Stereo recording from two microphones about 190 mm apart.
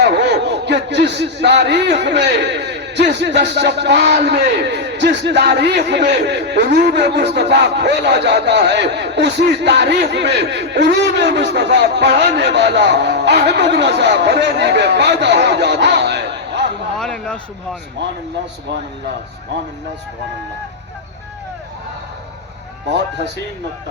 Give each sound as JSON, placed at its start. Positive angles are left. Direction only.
{"t": 0.0, "sound": "speech", "side_deg": -60}
{"t": 17.0, "sound": "a sound", "side_deg": 5}
{"t": 18.0, "sound": "speech", "side_deg": -65}
{"t": 22.9, "sound": "speech", "side_deg": -65}